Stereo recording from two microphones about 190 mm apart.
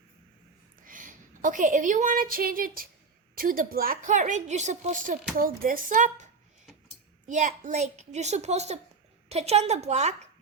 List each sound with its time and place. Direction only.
0.9 s a woman's voice: 45° right (ahead or behind)